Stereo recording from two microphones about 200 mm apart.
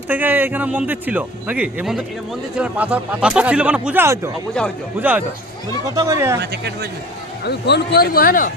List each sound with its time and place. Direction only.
0.1 s speech: 10° right (ahead or behind)
6.4 s speech: 55° right (ahead or behind)
7.4 s a man's voice: 55° left (ahead or behind)